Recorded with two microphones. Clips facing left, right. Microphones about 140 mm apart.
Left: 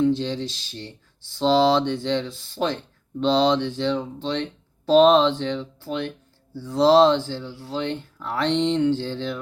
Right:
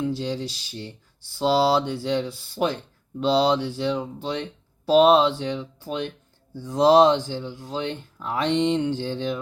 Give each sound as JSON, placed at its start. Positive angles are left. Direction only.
{"t": 0.0, "sound": "speech", "side_deg": -10}